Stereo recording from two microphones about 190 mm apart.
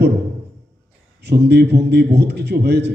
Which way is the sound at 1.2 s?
60° right (ahead or behind).